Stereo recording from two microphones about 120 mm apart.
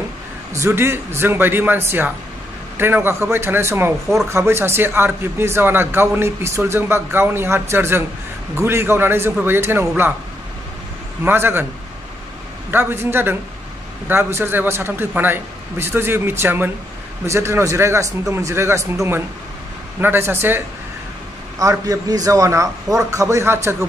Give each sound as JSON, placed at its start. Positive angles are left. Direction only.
{"t": 0.5, "sound": "speech", "side_deg": -25}
{"t": 11.2, "sound": "a man's voice", "side_deg": -20}
{"t": 12.7, "sound": "a man's voice", "side_deg": -20}
{"t": 21.5, "sound": "speech", "side_deg": -30}